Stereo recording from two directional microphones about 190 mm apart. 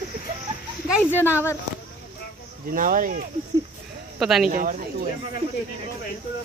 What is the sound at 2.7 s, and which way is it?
Speech, 45° right (ahead or behind).